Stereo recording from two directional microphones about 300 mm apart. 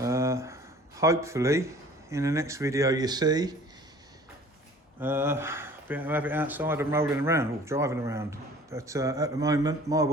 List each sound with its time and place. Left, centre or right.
0.0 s speech: centre
4.9 s speech: centre